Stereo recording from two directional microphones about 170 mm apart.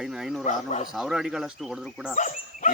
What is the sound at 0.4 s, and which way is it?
Speech, 45° left (ahead or behind).